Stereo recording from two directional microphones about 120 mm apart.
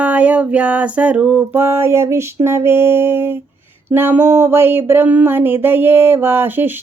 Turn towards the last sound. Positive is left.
turn(degrees=-15)  # may be behind; listen again after turning